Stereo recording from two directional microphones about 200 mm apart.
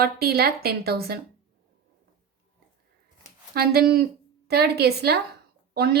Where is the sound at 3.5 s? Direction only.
50° right (ahead or behind).